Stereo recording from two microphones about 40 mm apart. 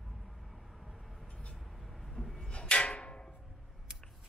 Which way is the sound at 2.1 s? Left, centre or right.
Centre.